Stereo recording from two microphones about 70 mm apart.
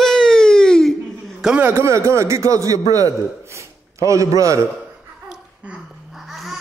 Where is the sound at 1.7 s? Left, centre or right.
Right.